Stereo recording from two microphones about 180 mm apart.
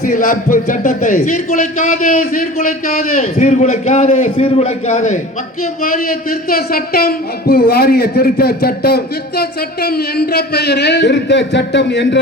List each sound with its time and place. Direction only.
0.0 s speech: 55° left (ahead or behind)
6.5 s a man's voice: 55° left (ahead or behind); by 12.2 s 70° left (ahead or behind)